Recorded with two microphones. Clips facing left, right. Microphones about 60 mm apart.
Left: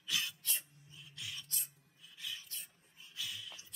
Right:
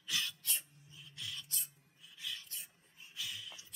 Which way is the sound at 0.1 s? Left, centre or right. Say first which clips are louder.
Even; left.